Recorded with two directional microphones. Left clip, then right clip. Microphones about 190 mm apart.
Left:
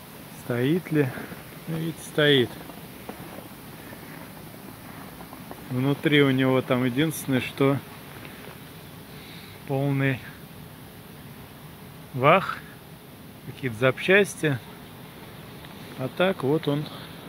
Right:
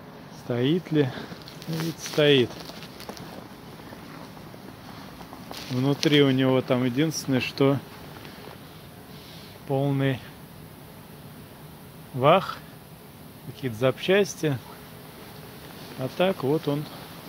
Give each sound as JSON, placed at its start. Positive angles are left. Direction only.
{"t": 0.5, "sound": "speech", "side_deg": -15}
{"t": 5.8, "sound": "speech", "side_deg": -15}
{"t": 9.7, "sound": "speech", "side_deg": -20}
{"t": 12.2, "sound": "speech", "side_deg": -15}
{"t": 13.6, "sound": "speech", "side_deg": -10}
{"t": 16.0, "sound": "speech", "side_deg": -15}